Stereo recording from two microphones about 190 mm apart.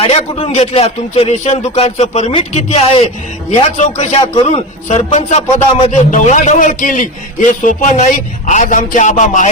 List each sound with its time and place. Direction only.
0.0 s a man's voice: 30° left (ahead or behind)